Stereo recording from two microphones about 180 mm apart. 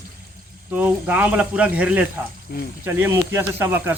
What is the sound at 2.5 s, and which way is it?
Speech, 60° left (ahead or behind).